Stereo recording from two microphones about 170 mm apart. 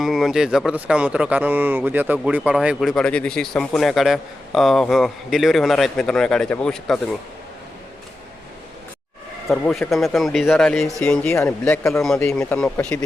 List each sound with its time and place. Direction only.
0.0 s speech: centre (ahead or behind)
9.5 s speech: centre (ahead or behind)
11.9 s speech: centre (ahead or behind)